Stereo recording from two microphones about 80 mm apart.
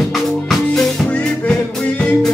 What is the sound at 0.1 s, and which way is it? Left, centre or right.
Music, centre.